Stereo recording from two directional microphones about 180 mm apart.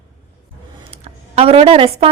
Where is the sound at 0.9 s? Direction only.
35° right (ahead or behind).